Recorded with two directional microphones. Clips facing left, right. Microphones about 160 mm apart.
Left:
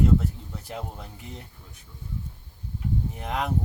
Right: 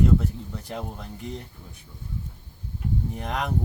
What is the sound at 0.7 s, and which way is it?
Speech, 5° left (ahead or behind).